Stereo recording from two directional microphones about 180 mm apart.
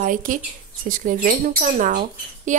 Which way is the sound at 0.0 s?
45° right (ahead or behind).